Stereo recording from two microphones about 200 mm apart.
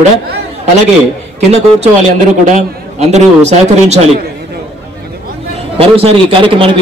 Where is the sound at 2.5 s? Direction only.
35° right (ahead or behind).